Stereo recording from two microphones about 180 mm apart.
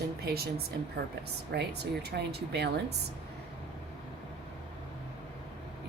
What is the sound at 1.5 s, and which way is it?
Speech, 60° right (ahead or behind).